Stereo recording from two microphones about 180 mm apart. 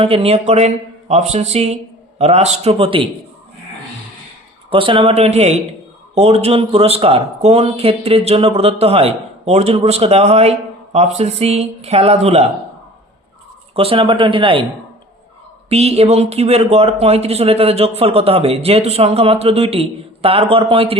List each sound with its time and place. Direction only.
0.0 s speech: 30° right (ahead or behind)
4.7 s speech: 30° right (ahead or behind)
13.7 s speech: 30° right (ahead or behind)
15.7 s speech: 35° right (ahead or behind)